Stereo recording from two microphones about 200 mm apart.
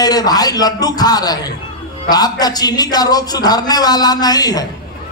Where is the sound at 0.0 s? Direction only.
20° left (ahead or behind).